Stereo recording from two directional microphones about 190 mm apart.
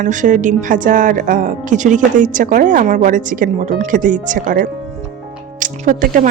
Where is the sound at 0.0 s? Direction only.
40° right (ahead or behind).